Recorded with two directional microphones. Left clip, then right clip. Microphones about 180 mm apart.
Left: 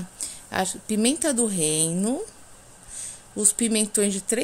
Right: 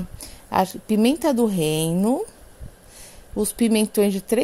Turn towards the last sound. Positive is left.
turn(degrees=-15)  # may be behind; listen again after turning